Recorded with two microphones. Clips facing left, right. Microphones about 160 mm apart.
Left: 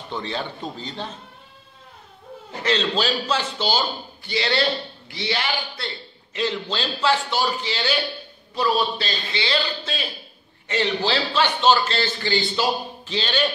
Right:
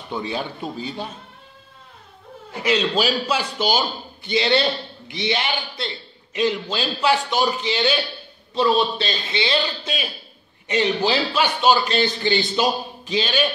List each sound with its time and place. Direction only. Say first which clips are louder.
0.1 s a man's voice: right 2 dB; 10° right (ahead or behind)
2.6 s a man's voice: right 2 dB; 10° right (ahead or behind)